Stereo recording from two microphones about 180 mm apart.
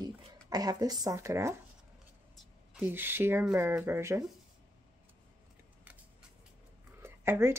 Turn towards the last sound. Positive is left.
turn(degrees=-15)  # may be behind; listen again after turning